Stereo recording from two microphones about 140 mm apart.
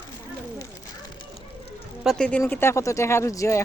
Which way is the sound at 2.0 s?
Centre (ahead or behind).